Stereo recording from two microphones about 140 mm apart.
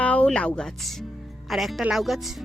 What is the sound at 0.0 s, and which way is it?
A woman's voice, 10° left (ahead or behind).